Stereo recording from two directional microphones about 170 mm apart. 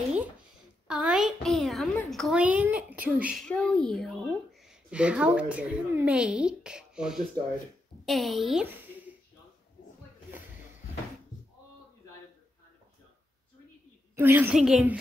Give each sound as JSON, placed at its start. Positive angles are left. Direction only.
{"t": 0.8, "sound": "a woman's voice", "side_deg": -5}
{"t": 3.3, "sound": "speech", "side_deg": 5}
{"t": 8.6, "sound": "a sound", "side_deg": -10}
{"t": 14.1, "sound": "a woman's voice", "side_deg": -10}